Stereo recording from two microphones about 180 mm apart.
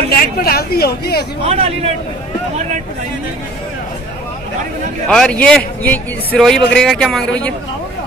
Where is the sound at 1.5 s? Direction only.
35° right (ahead or behind).